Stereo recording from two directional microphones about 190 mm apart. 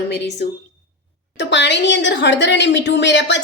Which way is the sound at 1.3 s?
65° left (ahead or behind).